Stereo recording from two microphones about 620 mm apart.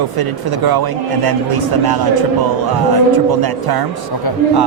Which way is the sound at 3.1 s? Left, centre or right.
Right.